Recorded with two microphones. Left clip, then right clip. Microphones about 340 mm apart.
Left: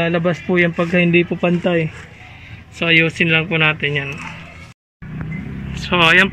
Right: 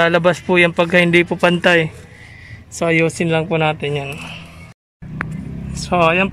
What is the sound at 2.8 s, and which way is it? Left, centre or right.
Speech, right.